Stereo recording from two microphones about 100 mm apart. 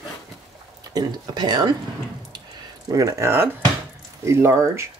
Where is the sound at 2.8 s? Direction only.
35° right (ahead or behind).